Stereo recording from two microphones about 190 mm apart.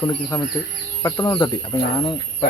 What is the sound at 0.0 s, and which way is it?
A man's voice, 20° left (ahead or behind).